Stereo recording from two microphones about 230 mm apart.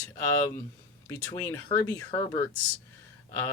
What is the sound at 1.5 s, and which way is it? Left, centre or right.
Speech, centre.